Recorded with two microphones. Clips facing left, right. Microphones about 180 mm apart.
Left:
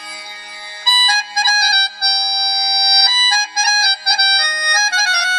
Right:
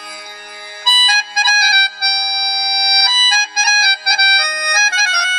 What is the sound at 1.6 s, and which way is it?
Music, 50° right (ahead or behind).